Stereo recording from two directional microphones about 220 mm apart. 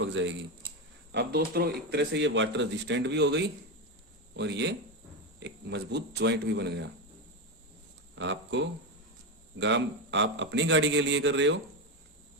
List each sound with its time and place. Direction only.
0.0 s keys jangling: 55° right (ahead or behind)
1.1 s speech: 45° right (ahead or behind)
8.1 s a man's voice: 55° right (ahead or behind)